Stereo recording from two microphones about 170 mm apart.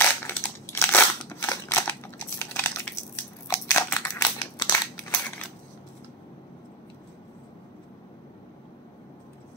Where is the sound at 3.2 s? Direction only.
15° left (ahead or behind).